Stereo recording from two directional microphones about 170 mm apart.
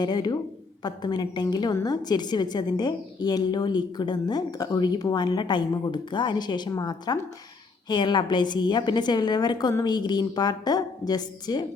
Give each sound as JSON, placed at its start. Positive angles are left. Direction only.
{"t": 0.0, "sound": "a woman's voice", "side_deg": 25}